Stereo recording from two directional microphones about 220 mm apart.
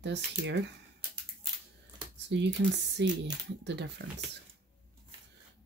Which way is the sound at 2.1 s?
55° right (ahead or behind).